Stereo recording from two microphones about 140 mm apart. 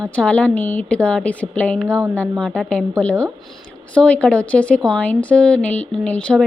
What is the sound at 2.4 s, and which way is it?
Speech, 5° left (ahead or behind).